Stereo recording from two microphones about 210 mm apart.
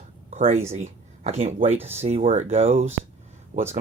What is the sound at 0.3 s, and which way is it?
Speech, 35° right (ahead or behind).